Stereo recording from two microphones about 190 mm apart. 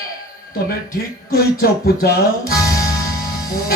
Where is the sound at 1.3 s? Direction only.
55° left (ahead or behind).